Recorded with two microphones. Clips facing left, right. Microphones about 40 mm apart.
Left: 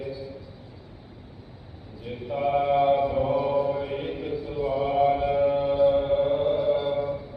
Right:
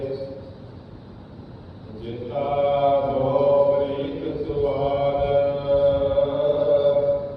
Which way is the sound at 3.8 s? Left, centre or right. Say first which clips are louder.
Right 4 dB; left.